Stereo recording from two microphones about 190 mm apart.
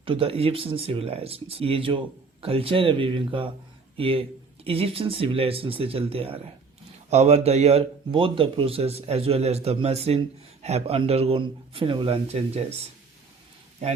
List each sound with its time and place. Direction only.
0.0 s a man's voice: 30° right (ahead or behind)